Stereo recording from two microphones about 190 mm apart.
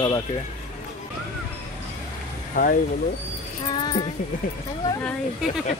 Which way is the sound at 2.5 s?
40° left (ahead or behind).